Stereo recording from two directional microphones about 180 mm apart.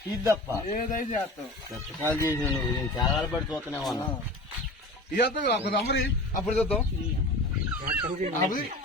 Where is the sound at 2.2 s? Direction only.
15° left (ahead or behind).